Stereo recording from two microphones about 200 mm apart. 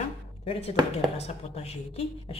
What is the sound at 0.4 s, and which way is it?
Speech, 30° left (ahead or behind).